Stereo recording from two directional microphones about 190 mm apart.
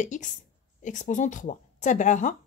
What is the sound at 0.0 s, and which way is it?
Speech, 40° left (ahead or behind).